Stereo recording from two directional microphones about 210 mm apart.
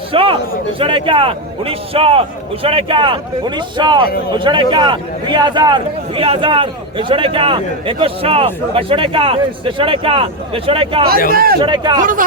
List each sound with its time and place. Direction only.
0.1 s a sound: 25° right (ahead or behind)
0.8 s speech: 25° right (ahead or behind)
11.3 s a man's voice: 45° right (ahead or behind)
11.6 s speech: 20° right (ahead or behind)